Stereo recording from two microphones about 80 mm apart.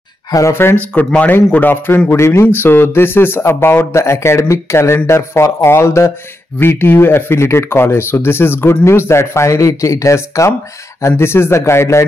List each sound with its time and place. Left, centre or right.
0.3 s speech: left
0.7 s speech: centre
2.0 s speech: left